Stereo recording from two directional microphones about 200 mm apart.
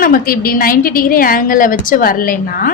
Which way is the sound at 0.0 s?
45° left (ahead or behind).